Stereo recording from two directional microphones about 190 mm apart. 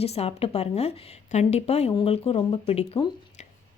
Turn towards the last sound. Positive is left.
turn(degrees=25)  # may be behind; listen again after turning